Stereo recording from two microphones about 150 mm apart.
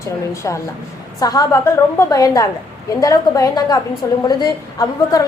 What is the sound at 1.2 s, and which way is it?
A woman's voice, 25° left (ahead or behind).